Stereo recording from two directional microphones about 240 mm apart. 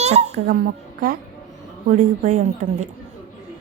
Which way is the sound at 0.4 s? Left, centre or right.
Right.